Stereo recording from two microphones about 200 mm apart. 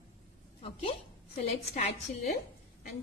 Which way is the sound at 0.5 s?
30° left (ahead or behind).